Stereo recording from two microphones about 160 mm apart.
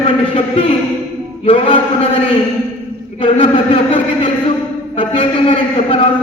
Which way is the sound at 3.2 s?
35° left (ahead or behind).